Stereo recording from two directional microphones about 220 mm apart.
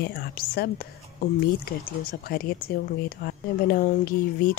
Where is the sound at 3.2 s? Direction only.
40° left (ahead or behind).